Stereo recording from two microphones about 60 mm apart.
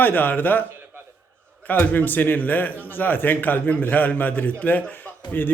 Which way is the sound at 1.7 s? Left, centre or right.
Left.